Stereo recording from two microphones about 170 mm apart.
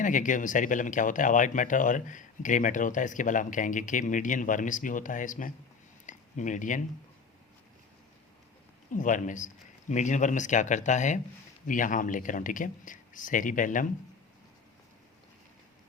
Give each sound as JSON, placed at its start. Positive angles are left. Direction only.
{"t": 0.0, "sound": "speech", "side_deg": 50}
{"t": 6.1, "sound": "a sound", "side_deg": 50}
{"t": 8.9, "sound": "speech", "side_deg": 50}